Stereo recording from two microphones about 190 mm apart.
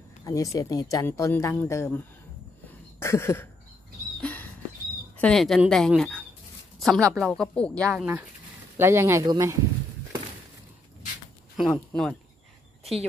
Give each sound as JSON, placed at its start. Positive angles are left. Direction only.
{"t": 0.2, "sound": "speech", "side_deg": 15}
{"t": 3.0, "sound": "speech", "side_deg": 15}
{"t": 4.2, "sound": "a sound", "side_deg": 10}
{"t": 5.1, "sound": "speech", "side_deg": 5}
{"t": 8.7, "sound": "speech", "side_deg": -15}
{"t": 11.5, "sound": "speech", "side_deg": 5}